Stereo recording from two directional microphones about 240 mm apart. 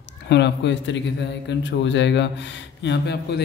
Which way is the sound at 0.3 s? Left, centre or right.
Left.